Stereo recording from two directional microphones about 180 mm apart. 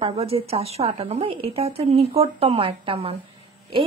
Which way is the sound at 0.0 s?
35° right (ahead or behind).